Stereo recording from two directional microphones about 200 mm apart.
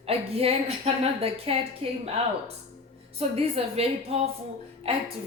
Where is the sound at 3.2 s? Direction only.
30° right (ahead or behind).